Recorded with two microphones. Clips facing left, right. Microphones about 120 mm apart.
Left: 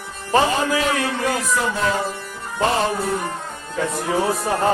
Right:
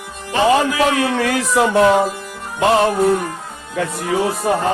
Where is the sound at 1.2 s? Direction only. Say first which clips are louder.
Right 5 dB; 80° right.